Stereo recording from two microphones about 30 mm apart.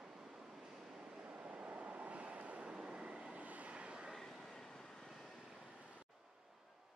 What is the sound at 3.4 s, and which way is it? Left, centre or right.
Vehicle, right.